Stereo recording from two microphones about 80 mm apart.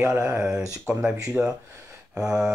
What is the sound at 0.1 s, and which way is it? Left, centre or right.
Speech, right.